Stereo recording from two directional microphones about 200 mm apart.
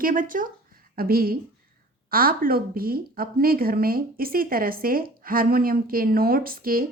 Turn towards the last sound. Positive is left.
turn(degrees=-45)  # may be behind; listen again after turning